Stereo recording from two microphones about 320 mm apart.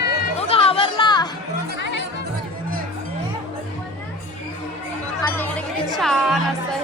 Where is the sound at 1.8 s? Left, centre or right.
Left.